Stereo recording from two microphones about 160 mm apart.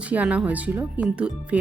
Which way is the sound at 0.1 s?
10° right (ahead or behind).